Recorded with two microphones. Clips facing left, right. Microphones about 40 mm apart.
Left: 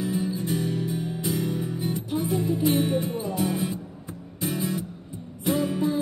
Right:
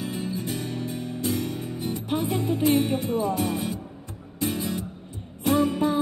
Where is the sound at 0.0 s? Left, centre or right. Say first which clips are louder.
Left 3 dB; right.